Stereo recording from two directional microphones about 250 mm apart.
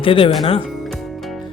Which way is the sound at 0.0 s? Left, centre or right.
Left.